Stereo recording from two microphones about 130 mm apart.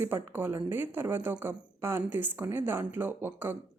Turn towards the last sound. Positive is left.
turn(degrees=-15)  # may be behind; listen again after turning